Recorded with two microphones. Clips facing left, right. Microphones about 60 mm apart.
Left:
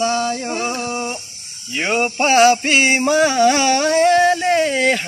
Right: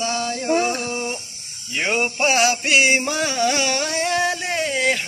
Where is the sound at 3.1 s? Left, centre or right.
Centre.